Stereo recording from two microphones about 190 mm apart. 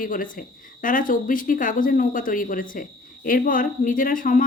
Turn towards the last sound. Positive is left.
turn(degrees=45)  # may be behind; listen again after turning